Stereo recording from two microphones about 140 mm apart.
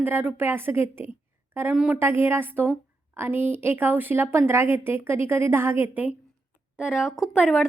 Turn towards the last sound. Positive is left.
turn(degrees=-5)  # may be behind; listen again after turning